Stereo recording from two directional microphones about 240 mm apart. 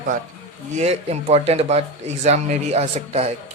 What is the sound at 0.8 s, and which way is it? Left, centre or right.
Speech, right.